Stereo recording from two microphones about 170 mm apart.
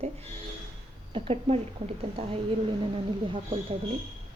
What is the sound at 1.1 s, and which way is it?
A woman's voice, 35° right (ahead or behind).